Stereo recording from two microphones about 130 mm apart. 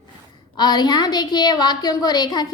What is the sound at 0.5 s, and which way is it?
A woman's voice, 30° left (ahead or behind).